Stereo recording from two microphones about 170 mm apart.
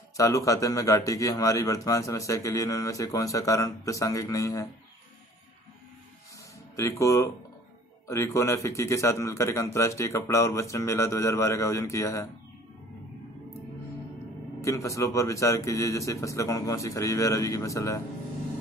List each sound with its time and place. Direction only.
0.2 s a man's voice: 20° left (ahead or behind)
6.8 s a man's voice: 15° left (ahead or behind)
14.6 s a man's voice: 20° left (ahead or behind)